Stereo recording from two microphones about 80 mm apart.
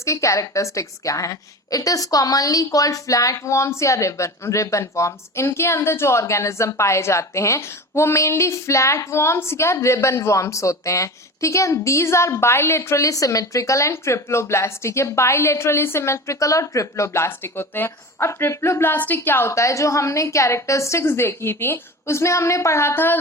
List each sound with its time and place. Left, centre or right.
0.0 s a woman's voice: left